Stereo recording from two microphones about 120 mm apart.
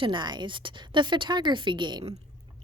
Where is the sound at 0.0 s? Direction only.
40° right (ahead or behind).